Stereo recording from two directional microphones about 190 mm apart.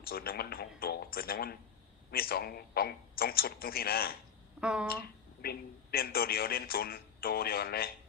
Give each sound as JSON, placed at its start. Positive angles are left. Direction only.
{"t": 0.0, "sound": "speech", "side_deg": 50}
{"t": 4.6, "sound": "speech", "side_deg": -5}
{"t": 4.9, "sound": "speech", "side_deg": 55}